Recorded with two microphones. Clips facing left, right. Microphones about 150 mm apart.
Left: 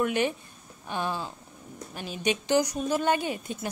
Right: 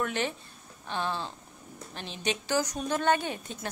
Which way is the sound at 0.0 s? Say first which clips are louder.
Left 5 dB; 15° left (ahead or behind).